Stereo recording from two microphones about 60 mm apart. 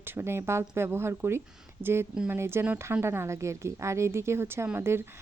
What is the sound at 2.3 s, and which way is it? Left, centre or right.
Speech, right.